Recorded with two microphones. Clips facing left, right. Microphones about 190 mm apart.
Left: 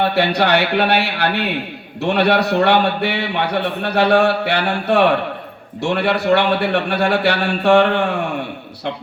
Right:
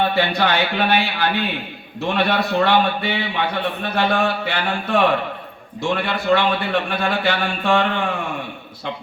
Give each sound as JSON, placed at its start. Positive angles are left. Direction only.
{"t": 0.1, "sound": "a man's voice", "side_deg": 70}